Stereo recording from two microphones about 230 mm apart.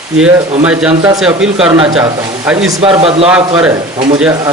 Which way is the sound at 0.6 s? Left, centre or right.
Centre.